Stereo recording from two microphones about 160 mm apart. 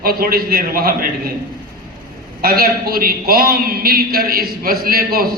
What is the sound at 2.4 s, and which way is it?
A man's voice, 65° right (ahead or behind).